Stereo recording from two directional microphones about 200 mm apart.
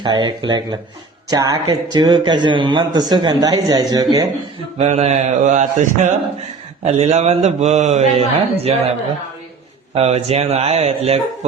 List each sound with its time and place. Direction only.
0.0 s a man's voice: 20° right (ahead or behind)
4.8 s a man's voice: 35° right (ahead or behind)
9.9 s a man's voice: 30° right (ahead or behind)